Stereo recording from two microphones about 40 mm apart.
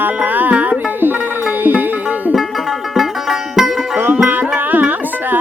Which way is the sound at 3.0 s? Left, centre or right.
Centre.